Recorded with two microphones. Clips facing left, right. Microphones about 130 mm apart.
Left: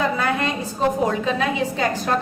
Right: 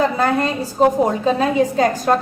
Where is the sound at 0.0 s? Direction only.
35° right (ahead or behind).